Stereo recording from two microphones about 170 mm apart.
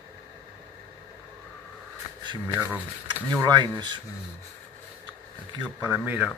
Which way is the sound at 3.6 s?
25° right (ahead or behind).